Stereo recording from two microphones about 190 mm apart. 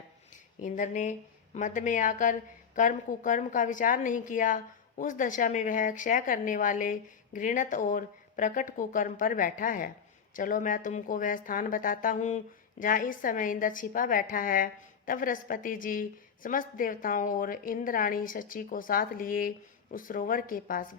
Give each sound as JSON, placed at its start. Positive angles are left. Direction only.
{"t": 0.6, "sound": "a woman's voice", "side_deg": 40}